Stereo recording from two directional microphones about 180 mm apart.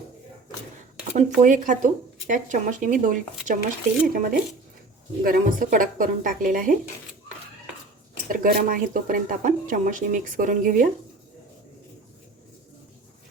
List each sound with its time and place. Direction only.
1.0 s speech: 45° right (ahead or behind)
8.3 s speech: 50° right (ahead or behind)